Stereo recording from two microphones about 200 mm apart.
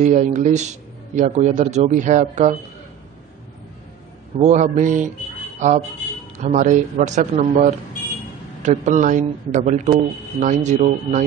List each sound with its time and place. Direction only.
0.0 s a man's voice: 35° right (ahead or behind)
4.4 s a man's voice: 35° right (ahead or behind)
8.6 s a man's voice: 35° right (ahead or behind)